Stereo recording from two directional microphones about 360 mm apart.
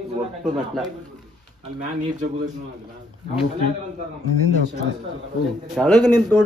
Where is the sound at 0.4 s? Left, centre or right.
Centre.